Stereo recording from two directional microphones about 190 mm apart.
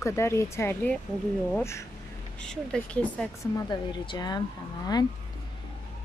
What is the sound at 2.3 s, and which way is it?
Speech, 5° left (ahead or behind).